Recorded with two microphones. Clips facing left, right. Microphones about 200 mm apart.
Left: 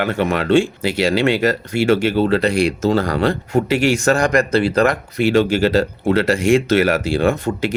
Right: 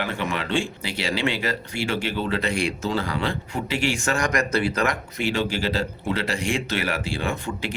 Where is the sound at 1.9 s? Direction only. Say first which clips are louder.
Left 11 dB; 40° left (ahead or behind).